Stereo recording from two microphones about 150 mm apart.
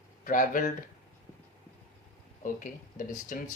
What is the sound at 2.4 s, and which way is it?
Speech, 60° left (ahead or behind).